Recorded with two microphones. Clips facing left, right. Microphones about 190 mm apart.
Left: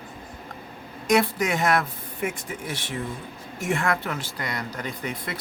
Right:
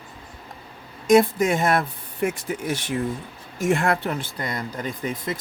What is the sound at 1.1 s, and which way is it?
Speech, 25° right (ahead or behind).